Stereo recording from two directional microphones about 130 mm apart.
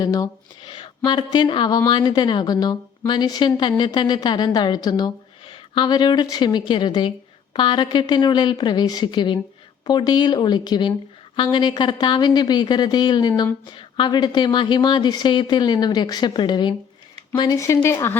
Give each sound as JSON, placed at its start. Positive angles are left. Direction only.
{"t": 0.0, "sound": "a woman's voice", "side_deg": 30}